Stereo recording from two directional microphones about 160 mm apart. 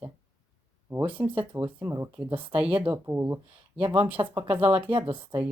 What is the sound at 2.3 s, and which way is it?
Speech, 35° right (ahead or behind).